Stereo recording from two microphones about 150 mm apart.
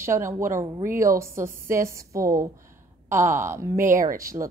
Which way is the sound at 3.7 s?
65° right (ahead or behind).